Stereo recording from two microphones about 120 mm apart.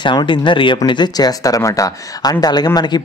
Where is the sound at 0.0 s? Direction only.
40° left (ahead or behind).